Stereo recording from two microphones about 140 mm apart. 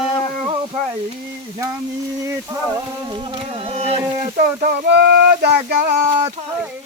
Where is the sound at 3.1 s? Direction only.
35° right (ahead or behind).